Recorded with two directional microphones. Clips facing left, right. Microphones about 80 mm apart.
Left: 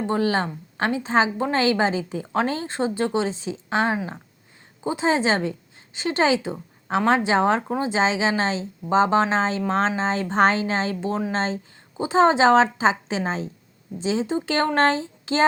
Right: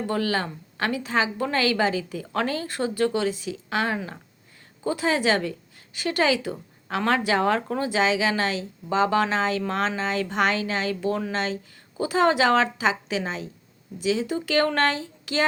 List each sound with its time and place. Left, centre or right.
0.1 s a woman's voice: left